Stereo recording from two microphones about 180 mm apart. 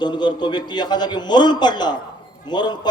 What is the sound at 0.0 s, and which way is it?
A man's voice, 25° left (ahead or behind).